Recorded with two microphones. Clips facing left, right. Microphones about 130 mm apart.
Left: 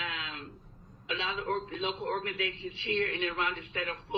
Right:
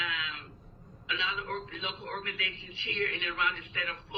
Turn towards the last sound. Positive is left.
turn(degrees=45)  # may be behind; listen again after turning